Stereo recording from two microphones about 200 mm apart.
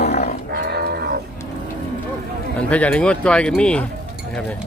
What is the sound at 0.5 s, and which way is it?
Livestock, 55° right (ahead or behind).